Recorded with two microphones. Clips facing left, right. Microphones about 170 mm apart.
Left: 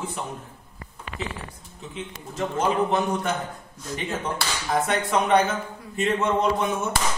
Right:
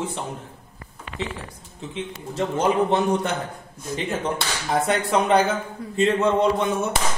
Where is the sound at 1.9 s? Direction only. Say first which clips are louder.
Right 4 dB; 30° right (ahead or behind).